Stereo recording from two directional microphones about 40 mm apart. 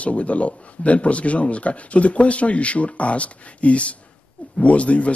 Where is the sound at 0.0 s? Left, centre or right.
Left.